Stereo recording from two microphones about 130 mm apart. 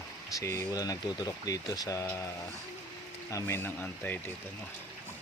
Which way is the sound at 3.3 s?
20° left (ahead or behind).